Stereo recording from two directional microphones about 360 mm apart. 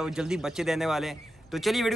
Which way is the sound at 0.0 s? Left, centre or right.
Centre.